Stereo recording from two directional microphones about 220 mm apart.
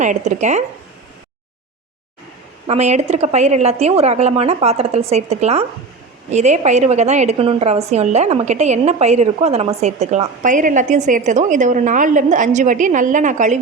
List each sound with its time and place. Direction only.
0.0 s a woman's voice: 35° right (ahead or behind)
2.6 s a woman's voice: 30° right (ahead or behind)